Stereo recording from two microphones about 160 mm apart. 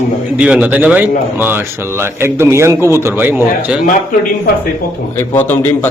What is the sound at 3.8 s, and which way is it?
Speech, 55° left (ahead or behind).